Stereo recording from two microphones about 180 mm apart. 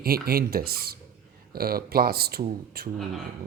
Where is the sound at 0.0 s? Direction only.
55° right (ahead or behind).